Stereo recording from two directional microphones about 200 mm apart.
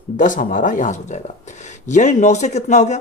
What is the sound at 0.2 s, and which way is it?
Speech, 40° left (ahead or behind).